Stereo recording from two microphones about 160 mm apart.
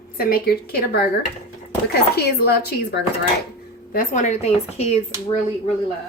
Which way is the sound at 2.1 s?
90° left.